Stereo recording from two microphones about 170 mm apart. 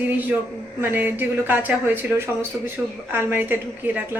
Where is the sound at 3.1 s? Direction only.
10° right (ahead or behind).